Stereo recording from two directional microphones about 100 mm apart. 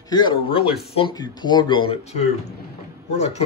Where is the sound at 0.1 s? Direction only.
50° left (ahead or behind).